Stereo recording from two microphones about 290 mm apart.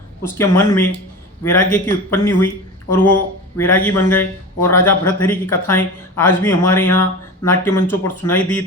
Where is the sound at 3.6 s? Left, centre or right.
Centre.